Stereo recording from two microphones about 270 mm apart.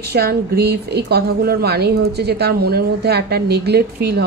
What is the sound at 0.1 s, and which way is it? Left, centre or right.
A woman's voice, right.